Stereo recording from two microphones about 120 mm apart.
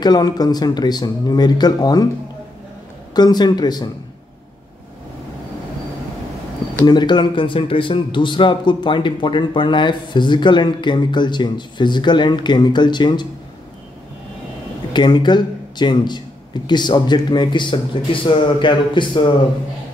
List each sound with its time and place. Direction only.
0.0 s a man's voice: 35° left (ahead or behind)
3.2 s a man's voice: 35° left (ahead or behind)
6.9 s a man's voice: 40° left (ahead or behind)
14.9 s a man's voice: 40° left (ahead or behind)